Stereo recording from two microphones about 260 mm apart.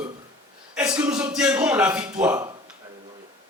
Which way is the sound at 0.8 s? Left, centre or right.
Centre.